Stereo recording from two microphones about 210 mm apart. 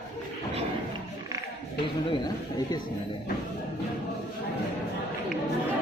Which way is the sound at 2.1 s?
20° left (ahead or behind).